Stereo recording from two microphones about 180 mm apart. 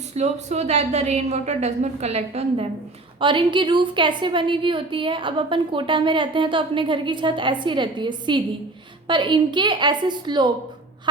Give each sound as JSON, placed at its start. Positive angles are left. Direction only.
{"t": 0.1, "sound": "a woman's voice", "side_deg": -40}